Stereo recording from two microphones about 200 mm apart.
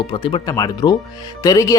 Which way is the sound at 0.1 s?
25° left (ahead or behind).